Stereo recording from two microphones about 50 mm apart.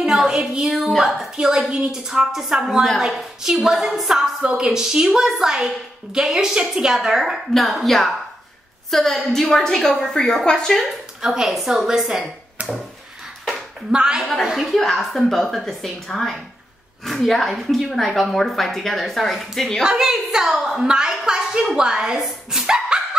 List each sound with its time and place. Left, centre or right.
0.0 s a woman's voice: centre
1.3 s a woman's voice: centre
11.1 s a woman's voice: centre
13.9 s a woman's voice: centre
14.2 s a woman's voice: centre
19.8 s a woman's voice: centre